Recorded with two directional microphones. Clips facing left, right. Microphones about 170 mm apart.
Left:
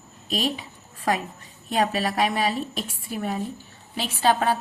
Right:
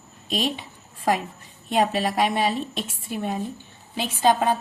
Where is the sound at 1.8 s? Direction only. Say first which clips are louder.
Right 1 dB; 25° right (ahead or behind).